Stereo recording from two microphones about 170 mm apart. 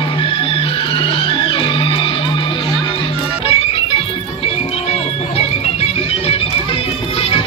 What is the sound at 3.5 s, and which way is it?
Music, 35° left (ahead or behind).